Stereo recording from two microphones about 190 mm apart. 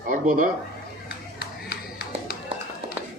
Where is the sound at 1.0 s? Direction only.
55° left (ahead or behind).